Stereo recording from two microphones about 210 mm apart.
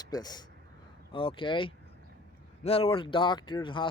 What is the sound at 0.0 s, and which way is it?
A man's voice, 20° left (ahead or behind).